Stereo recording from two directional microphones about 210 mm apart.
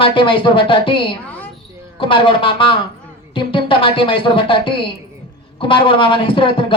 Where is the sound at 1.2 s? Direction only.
5° left (ahead or behind).